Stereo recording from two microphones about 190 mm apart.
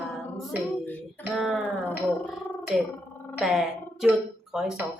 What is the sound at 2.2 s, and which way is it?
Gargling, centre (ahead or behind).